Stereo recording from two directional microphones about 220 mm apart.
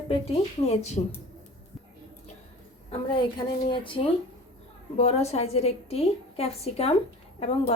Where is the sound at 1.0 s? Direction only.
25° left (ahead or behind).